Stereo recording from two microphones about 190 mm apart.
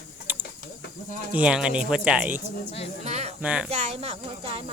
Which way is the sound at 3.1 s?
35° right (ahead or behind).